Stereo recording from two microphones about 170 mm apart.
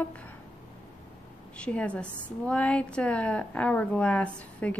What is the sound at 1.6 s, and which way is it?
A woman's voice, 5° left (ahead or behind).